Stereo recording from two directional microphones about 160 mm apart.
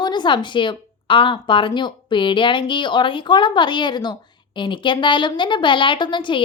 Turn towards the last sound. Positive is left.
turn(degrees=30)  # may be behind; listen again after turning